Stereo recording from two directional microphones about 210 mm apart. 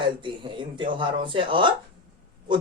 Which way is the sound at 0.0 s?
25° right (ahead or behind).